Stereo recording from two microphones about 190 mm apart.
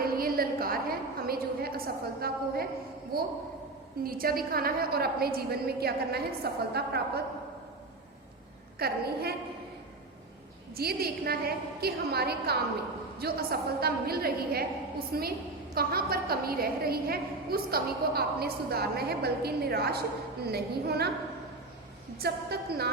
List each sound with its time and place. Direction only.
0.0 s a sound: 50° right (ahead or behind)
2.2 s a woman's voice: 55° right (ahead or behind)
8.8 s a woman's voice: 55° right (ahead or behind)
10.8 s a woman's voice: 55° right (ahead or behind)
22.2 s a woman's voice: 55° right (ahead or behind)